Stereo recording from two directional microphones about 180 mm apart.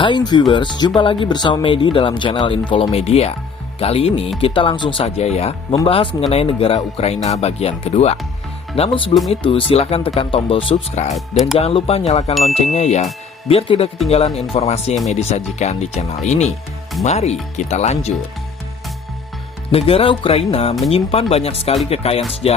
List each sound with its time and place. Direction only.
0.0 s speech: 25° left (ahead or behind)
12.3 s a sound: centre (ahead or behind)
12.7 s speech: 40° left (ahead or behind)
19.7 s speech: 30° left (ahead or behind)